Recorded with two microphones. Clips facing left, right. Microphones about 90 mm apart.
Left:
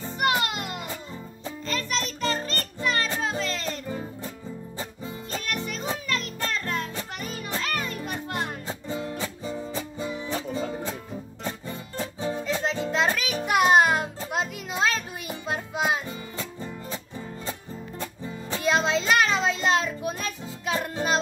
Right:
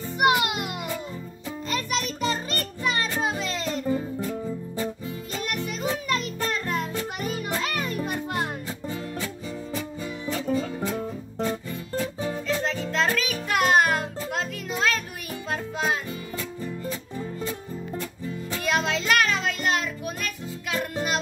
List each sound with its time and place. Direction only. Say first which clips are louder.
0.2 s music: right 3 dB; 10° right (ahead or behind)
1.7 s music: right 1 dB; 10° right (ahead or behind)
6.5 s music: right 1 dB; 15° right (ahead or behind)
8.8 s music: left 1 dB; 25° left (ahead or behind)
12.0 s music: even; 25° left (ahead or behind)